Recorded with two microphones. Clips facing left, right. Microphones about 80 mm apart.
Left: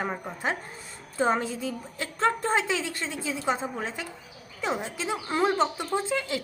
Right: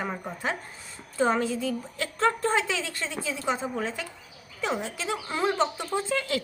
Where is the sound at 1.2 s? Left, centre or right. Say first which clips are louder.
Right 1 dB; left; by 6.1 s centre.